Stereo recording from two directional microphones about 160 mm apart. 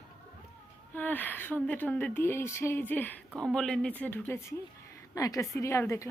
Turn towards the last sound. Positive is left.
turn(degrees=15)  # may be behind; listen again after turning